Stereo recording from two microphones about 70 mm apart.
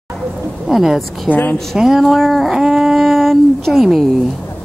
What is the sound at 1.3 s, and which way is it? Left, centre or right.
Speech, left.